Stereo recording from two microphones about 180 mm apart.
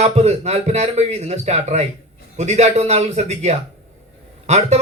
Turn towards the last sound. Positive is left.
turn(degrees=-40)  # may be behind; listen again after turning